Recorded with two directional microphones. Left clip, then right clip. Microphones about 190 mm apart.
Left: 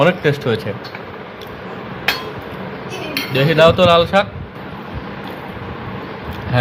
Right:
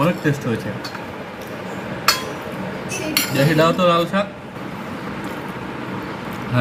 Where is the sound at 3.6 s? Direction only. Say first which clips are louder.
Left 7 dB; 50° left (ahead or behind).